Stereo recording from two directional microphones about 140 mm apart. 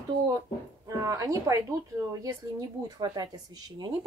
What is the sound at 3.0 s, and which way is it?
Speech, 30° right (ahead or behind).